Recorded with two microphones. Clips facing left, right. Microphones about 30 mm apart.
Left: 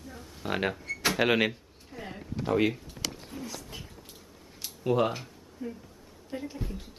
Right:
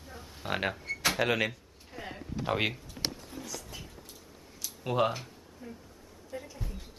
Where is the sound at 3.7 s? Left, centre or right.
Left.